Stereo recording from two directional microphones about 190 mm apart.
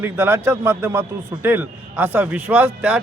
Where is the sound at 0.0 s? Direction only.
10° right (ahead or behind).